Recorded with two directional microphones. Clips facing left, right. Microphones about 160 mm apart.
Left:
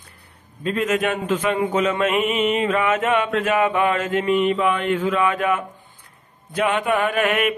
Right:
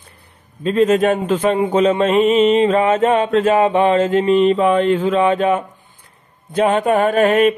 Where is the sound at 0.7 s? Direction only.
30° right (ahead or behind).